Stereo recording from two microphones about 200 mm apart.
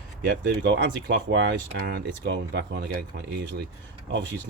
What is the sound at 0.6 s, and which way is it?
Speech, 65° right (ahead or behind).